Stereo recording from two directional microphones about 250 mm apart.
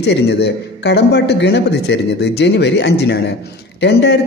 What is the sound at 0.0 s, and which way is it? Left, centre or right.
A man's voice, left.